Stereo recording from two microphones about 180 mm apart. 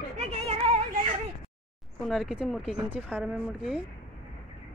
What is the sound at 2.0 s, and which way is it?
Speech, centre (ahead or behind).